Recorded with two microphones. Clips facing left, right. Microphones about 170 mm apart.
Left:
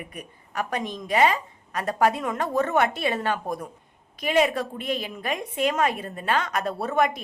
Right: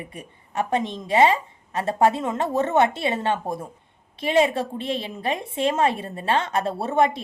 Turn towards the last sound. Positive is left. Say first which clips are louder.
# right 3 dB
turn(degrees=-25)  # may be behind; listen again after turning